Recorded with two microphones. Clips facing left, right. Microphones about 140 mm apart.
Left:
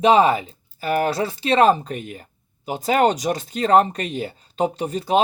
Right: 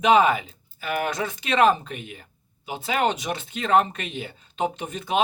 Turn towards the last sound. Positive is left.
turn(degrees=35)  # may be behind; listen again after turning